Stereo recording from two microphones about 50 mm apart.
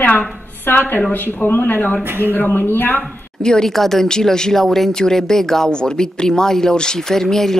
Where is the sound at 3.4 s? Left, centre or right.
Centre.